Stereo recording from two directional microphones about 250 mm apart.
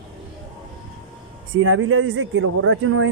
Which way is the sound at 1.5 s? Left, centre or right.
Right.